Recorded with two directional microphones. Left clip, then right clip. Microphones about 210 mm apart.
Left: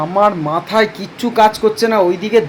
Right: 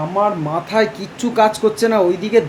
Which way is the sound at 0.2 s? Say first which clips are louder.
Left 4 dB; 10° left (ahead or behind).